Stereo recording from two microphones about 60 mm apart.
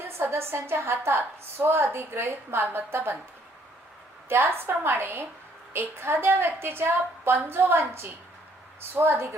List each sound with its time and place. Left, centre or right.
0.0 s a woman's voice: right
4.3 s a woman's voice: right